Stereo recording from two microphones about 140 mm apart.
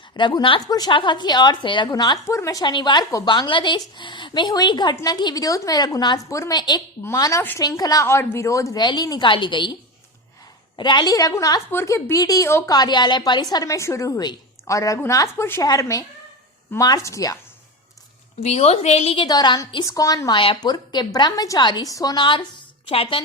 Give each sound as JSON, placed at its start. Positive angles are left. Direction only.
{"t": 0.2, "sound": "a woman's voice", "side_deg": 35}
{"t": 10.8, "sound": "a woman's voice", "side_deg": 35}
{"t": 18.3, "sound": "a woman's voice", "side_deg": 50}
{"t": 19.3, "sound": "a woman's voice", "side_deg": 30}